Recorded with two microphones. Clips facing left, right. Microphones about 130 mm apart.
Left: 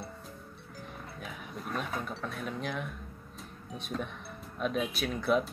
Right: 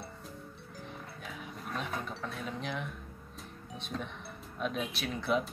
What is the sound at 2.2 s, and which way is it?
Dishes, 25° right (ahead or behind).